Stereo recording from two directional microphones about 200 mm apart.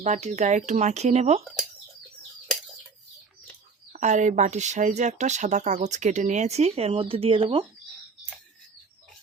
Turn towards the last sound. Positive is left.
turn(degrees=-25)  # may be behind; listen again after turning